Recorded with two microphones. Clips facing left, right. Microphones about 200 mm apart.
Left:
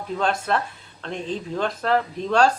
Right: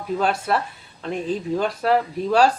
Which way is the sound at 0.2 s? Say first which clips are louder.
Even; 5° right (ahead or behind).